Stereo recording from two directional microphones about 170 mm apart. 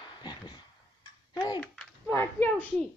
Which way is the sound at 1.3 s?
25° left (ahead or behind).